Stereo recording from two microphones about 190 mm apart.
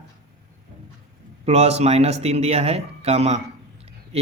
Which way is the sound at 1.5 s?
35° right (ahead or behind).